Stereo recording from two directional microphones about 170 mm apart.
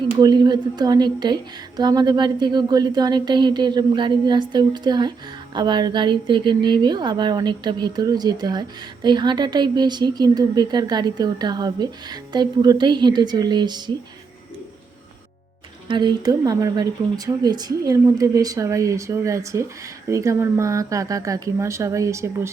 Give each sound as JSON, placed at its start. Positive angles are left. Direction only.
{"t": 0.2, "sound": "a woman's voice", "side_deg": -25}
{"t": 15.9, "sound": "a woman's voice", "side_deg": -25}